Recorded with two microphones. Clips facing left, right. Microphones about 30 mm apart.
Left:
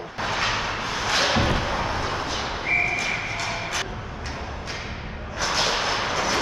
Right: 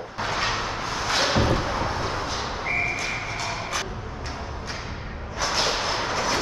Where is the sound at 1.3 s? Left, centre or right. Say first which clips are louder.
Even; left.